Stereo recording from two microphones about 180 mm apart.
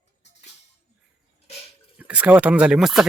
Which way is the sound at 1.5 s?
35° left (ahead or behind).